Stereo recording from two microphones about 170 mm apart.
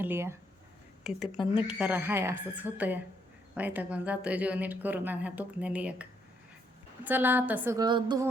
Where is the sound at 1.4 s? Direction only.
30° left (ahead or behind).